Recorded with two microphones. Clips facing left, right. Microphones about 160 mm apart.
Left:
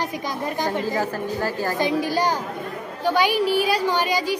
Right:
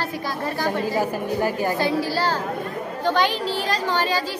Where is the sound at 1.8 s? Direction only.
15° left (ahead or behind).